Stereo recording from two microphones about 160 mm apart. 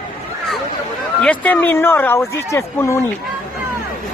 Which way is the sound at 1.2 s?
10° left (ahead or behind).